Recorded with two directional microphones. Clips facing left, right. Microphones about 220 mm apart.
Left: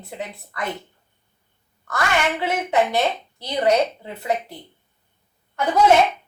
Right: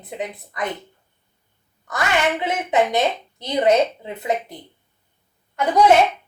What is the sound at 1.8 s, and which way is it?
A woman's voice, 20° right (ahead or behind).